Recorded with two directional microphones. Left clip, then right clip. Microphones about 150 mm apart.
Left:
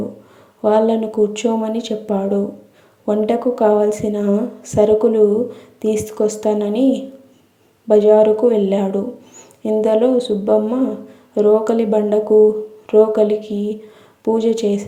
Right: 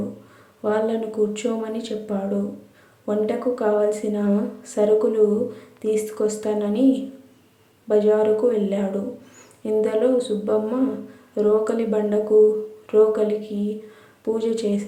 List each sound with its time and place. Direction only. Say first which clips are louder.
0.6 s speech: left 8 dB; 30° left (ahead or behind)